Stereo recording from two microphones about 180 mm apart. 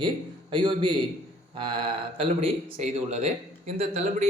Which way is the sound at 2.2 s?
35° right (ahead or behind).